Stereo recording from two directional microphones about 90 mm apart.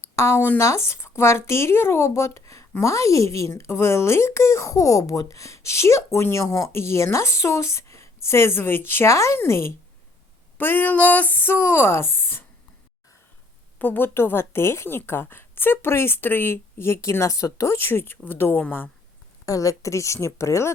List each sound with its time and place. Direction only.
0.0 s a woman's voice: 30° left (ahead or behind)
13.7 s a woman's voice: 20° left (ahead or behind)
19.5 s speech: 40° left (ahead or behind)